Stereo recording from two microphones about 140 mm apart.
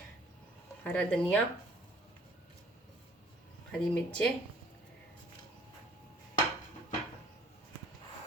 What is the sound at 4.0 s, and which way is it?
Speech, 10° left (ahead or behind).